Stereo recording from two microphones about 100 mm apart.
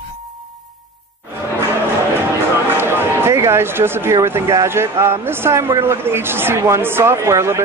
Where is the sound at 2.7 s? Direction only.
25° right (ahead or behind).